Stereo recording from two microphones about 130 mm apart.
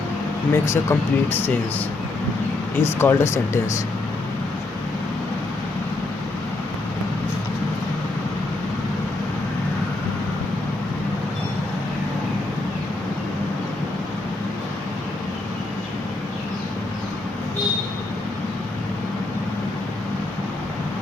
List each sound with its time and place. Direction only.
0.5 s speech: 20° left (ahead or behind)
2.8 s speech: 20° left (ahead or behind)